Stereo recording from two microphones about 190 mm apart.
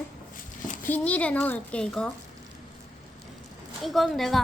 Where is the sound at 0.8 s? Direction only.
10° left (ahead or behind).